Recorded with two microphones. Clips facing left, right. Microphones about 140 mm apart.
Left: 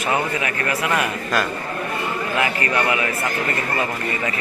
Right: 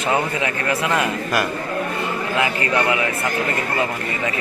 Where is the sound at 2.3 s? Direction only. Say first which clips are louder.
Right 1 dB; 20° right (ahead or behind).